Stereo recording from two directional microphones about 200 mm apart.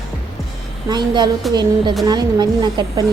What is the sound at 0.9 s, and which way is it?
Speech, 20° right (ahead or behind).